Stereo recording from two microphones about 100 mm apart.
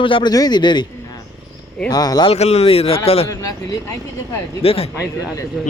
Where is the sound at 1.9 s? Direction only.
40° left (ahead or behind).